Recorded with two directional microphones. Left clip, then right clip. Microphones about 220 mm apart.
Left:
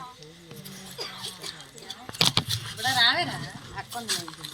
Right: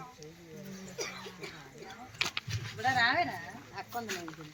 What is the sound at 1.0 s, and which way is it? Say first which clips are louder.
Music: left 2 dB; 55° right (ahead or behind).